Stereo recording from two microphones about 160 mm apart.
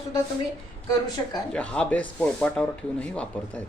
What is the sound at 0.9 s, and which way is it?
Speech, 25° left (ahead or behind).